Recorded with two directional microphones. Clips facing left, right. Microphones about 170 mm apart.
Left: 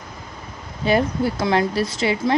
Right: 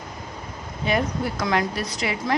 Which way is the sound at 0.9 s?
30° left (ahead or behind).